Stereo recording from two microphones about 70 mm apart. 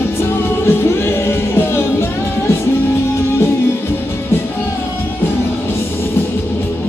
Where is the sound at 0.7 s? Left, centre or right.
Left.